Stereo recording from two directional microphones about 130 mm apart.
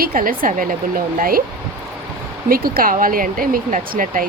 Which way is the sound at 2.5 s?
90° right.